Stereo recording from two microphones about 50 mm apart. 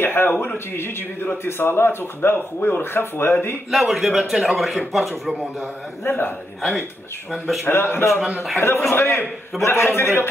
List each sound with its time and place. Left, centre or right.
0.0 s speech: left
3.7 s a man's voice: centre
6.0 s speech: left
7.6 s speech: left
9.6 s a man's voice: left